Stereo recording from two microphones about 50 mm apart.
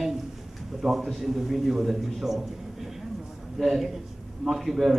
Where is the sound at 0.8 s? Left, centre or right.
Centre.